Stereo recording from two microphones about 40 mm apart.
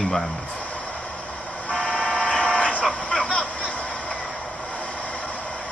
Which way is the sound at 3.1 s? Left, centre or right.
Left.